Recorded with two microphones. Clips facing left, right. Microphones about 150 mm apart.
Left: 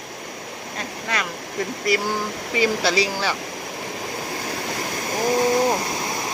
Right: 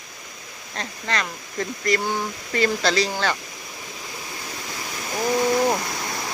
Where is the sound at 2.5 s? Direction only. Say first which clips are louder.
Left 1 dB; 10° left (ahead or behind).